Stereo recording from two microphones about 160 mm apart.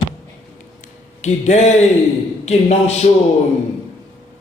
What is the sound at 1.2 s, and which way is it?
Speech, 45° left (ahead or behind).